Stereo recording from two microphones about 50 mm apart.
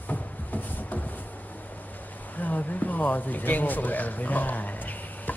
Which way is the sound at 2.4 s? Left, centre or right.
Left.